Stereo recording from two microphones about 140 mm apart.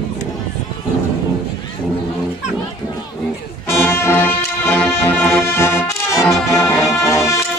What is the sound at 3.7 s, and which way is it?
Music, 15° left (ahead or behind).